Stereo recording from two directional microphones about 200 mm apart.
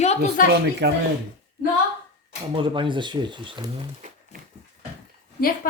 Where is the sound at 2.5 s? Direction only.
25° right (ahead or behind).